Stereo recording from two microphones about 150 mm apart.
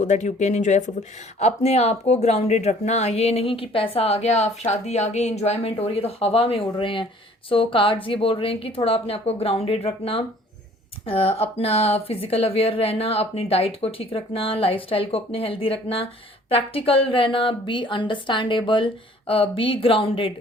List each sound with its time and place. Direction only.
0.0 s a woman's voice: 50° left (ahead or behind); by 20.3 s 35° left (ahead or behind)